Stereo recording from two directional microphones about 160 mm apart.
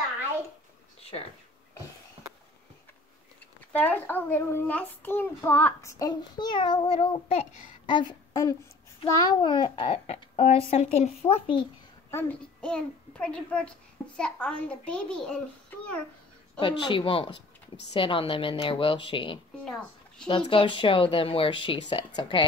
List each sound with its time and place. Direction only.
3.7 s a child's voice: 10° left (ahead or behind); by 11.6 s 35° left (ahead or behind)
12.1 s a child's voice: 10° left (ahead or behind)
16.5 s speech: 30° left (ahead or behind)
19.6 s a child's voice: 5° left (ahead or behind)
20.2 s speech: 35° left (ahead or behind)